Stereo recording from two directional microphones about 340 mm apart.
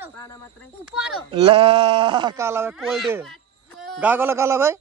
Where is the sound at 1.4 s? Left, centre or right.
Centre.